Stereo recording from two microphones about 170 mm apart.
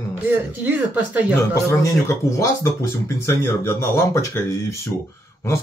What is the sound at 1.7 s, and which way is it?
Speech, 20° left (ahead or behind).